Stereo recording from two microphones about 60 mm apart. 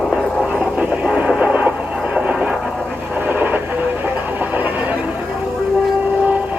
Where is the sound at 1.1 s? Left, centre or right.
Centre.